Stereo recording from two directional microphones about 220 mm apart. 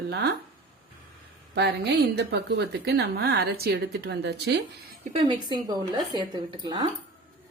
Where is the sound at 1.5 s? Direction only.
50° right (ahead or behind).